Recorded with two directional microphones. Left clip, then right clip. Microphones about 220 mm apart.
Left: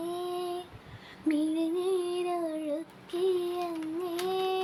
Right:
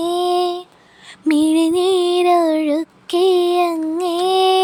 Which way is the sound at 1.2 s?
40° right (ahead or behind).